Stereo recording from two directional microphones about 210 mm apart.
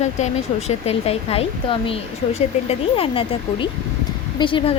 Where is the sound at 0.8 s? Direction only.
30° left (ahead or behind).